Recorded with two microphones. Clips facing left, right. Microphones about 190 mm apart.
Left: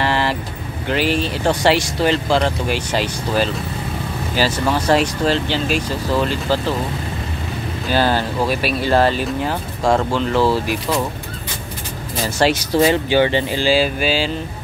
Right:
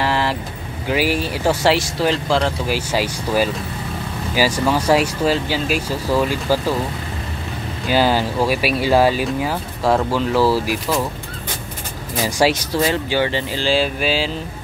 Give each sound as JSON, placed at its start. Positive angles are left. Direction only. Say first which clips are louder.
{"t": 0.0, "sound": "vehicle", "louder": "left 1 dB", "side_deg": 0}
{"t": 0.8, "sound": "speech", "louder": "even", "side_deg": -10}
{"t": 7.9, "sound": "speech", "louder": "right 1 dB", "side_deg": -10}
{"t": 12.8, "sound": "speech", "louder": "left 4 dB", "side_deg": 20}
{"t": 13.7, "sound": "speech", "louder": "even", "side_deg": 0}